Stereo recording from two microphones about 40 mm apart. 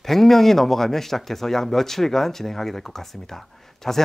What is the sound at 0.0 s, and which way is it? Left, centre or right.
Speech, centre.